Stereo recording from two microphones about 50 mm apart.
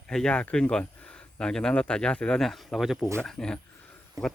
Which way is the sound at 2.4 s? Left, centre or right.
Centre.